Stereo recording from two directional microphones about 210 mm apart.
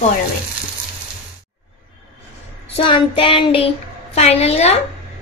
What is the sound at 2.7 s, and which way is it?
A woman's voice, 25° left (ahead or behind).